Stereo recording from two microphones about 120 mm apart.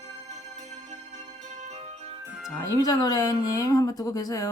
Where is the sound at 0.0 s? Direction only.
70° right (ahead or behind).